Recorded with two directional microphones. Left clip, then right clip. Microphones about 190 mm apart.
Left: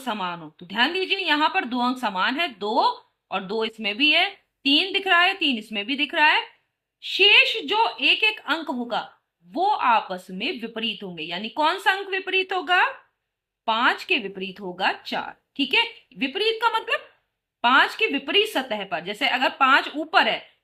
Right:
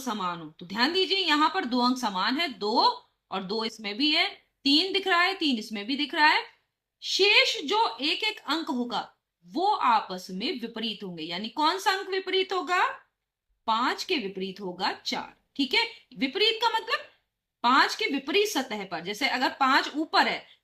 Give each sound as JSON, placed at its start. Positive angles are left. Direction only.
{"t": 0.0, "sound": "speech", "side_deg": 30}